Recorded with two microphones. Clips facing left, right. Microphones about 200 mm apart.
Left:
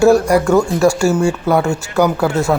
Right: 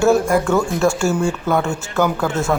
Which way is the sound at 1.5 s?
10° left (ahead or behind).